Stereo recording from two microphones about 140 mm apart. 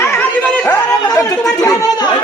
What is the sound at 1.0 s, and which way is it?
Chatter, 30° left (ahead or behind).